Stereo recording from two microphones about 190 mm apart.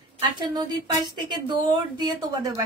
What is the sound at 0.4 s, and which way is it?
Speech, 20° right (ahead or behind).